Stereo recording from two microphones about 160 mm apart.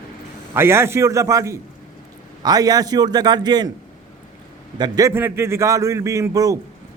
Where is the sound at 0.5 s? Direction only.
15° right (ahead or behind).